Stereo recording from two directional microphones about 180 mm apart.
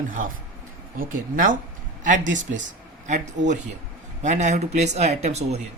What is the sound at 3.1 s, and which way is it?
A man's voice, 40° right (ahead or behind).